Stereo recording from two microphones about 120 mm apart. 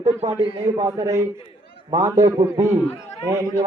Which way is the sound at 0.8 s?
25° right (ahead or behind).